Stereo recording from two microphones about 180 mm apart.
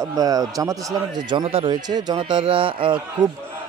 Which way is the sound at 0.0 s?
20° right (ahead or behind).